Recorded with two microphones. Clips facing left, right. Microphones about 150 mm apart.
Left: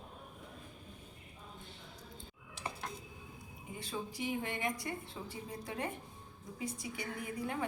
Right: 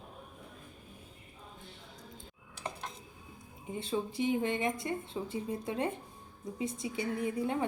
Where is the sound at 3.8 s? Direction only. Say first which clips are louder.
Right 7 dB; 25° right (ahead or behind).